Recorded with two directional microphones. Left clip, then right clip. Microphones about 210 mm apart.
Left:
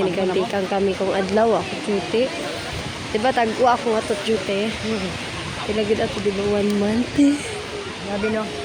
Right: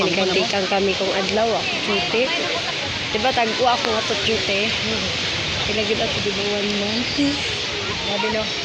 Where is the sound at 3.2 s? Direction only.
25° left (ahead or behind).